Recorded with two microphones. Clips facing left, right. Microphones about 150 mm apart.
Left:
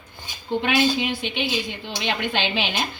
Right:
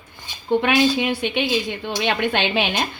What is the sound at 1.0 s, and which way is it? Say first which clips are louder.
A woman's voice: right 4 dB; 55° right (ahead or behind).